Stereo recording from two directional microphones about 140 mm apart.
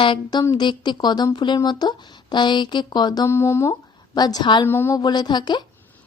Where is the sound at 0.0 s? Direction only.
35° left (ahead or behind).